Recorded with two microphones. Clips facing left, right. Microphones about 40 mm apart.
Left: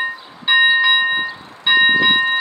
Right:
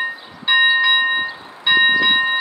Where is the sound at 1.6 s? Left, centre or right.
Centre.